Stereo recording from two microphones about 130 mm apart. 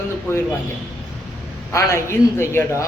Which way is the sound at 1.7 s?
20° left (ahead or behind).